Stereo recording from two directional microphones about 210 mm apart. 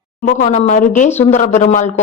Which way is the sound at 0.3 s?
35° left (ahead or behind).